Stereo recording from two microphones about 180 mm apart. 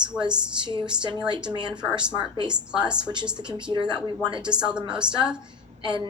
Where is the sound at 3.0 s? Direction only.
25° right (ahead or behind).